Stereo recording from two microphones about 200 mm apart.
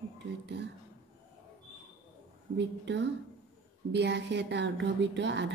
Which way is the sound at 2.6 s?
60° right (ahead or behind).